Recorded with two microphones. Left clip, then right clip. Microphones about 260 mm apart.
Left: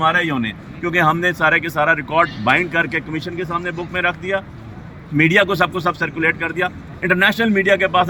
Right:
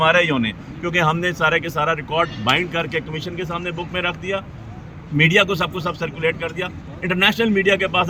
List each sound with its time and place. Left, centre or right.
0.0 s speech: centre